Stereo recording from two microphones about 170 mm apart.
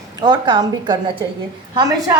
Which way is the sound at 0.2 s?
25° right (ahead or behind).